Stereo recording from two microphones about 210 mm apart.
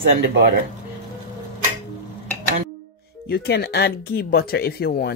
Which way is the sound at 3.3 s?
50° left (ahead or behind).